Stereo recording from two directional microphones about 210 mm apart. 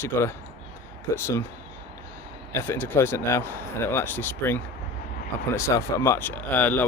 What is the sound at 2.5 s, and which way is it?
Speech, 10° left (ahead or behind).